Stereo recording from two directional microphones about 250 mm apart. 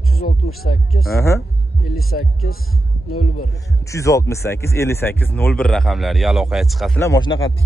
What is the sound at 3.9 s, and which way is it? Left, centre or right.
Speech, centre.